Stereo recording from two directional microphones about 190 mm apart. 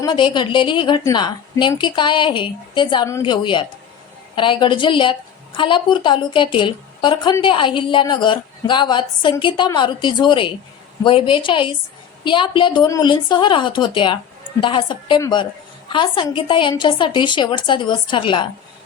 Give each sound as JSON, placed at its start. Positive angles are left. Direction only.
{"t": 0.0, "sound": "a woman's voice", "side_deg": 25}